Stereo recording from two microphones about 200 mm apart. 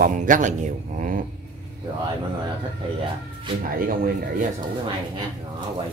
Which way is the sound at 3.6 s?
45° right (ahead or behind).